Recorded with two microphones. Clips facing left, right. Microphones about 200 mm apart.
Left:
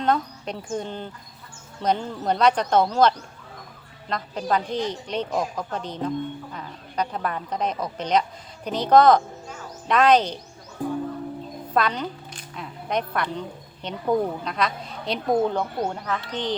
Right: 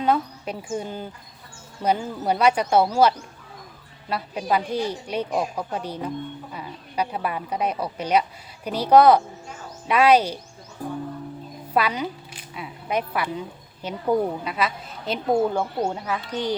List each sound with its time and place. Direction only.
0.0 s speech: 5° right (ahead or behind)
10.8 s music: 20° left (ahead or behind)
11.7 s a woman's voice: 10° right (ahead or behind)